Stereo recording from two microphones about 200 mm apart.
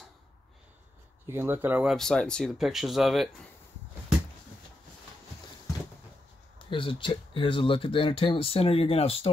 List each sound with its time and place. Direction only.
1.3 s speech: 10° right (ahead or behind)
6.7 s speech: 25° left (ahead or behind)